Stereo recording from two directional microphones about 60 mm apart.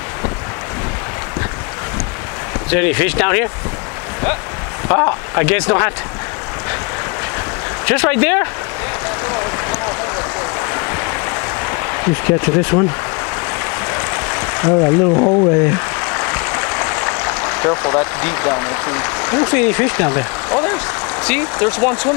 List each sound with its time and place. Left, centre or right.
2.7 s speech: centre
4.8 s speech: left
7.8 s speech: centre
10.6 s stream: left
13.8 s a sound: left